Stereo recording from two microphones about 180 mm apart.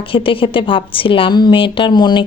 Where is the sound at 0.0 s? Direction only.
30° left (ahead or behind).